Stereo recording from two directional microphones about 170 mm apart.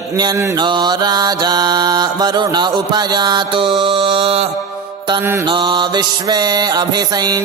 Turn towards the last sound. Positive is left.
turn(degrees=-25)  # may be behind; listen again after turning